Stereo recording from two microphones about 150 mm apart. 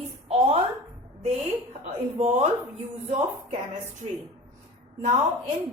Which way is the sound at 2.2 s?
50° right (ahead or behind).